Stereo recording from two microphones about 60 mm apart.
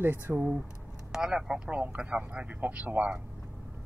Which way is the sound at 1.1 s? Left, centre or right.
Centre.